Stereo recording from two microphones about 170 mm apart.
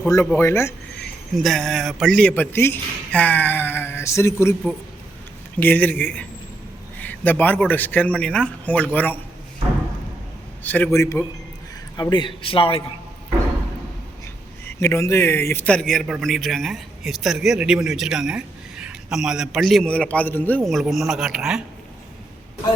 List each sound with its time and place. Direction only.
0.3 s a man's voice: 15° left (ahead or behind)
1.3 s a man's voice: centre (ahead or behind)
5.5 s a man's voice: 10° left (ahead or behind)
10.6 s a man's voice: 10° left (ahead or behind); by 12.8 s 30° left (ahead or behind)
14.8 s a man's voice: 15° left (ahead or behind)
20.7 s a man's voice: centre (ahead or behind)